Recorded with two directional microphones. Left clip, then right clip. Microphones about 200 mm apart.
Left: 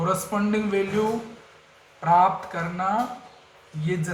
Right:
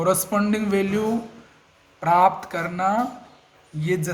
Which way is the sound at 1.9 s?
55° right (ahead or behind).